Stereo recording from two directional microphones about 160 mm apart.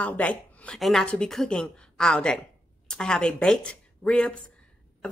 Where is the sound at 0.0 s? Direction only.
10° left (ahead or behind).